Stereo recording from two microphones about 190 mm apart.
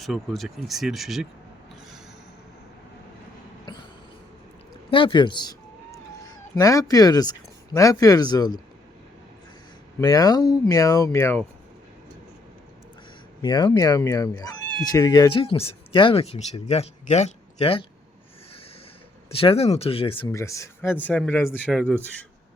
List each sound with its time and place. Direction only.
0.0 s speech: centre (ahead or behind)
4.9 s a sound: 25° left (ahead or behind)
6.6 s speech: 15° left (ahead or behind)
10.0 s speech: 20° left (ahead or behind)
13.4 s speech: 20° left (ahead or behind)
19.3 s speech: 30° left (ahead or behind)
20.3 s speech: 15° left (ahead or behind)